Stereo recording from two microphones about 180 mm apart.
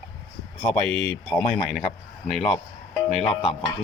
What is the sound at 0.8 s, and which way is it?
Speech, 30° right (ahead or behind).